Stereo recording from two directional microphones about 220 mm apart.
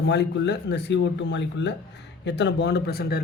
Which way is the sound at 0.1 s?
50° left (ahead or behind).